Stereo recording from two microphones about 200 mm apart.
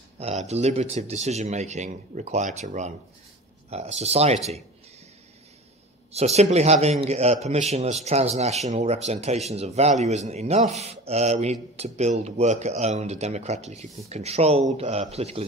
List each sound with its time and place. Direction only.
0.2 s a man's voice: 35° right (ahead or behind)
6.1 s a man's voice: 35° right (ahead or behind)